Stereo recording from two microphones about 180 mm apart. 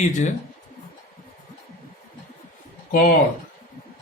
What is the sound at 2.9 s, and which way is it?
Speech, 50° left (ahead or behind).